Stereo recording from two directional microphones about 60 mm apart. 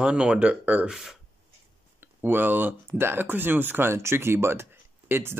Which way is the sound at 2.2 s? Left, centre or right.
Right.